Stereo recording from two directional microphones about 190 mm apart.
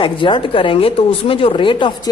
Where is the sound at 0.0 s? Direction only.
25° left (ahead or behind).